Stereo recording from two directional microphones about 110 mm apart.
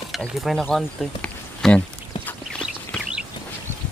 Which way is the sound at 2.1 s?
45° left (ahead or behind).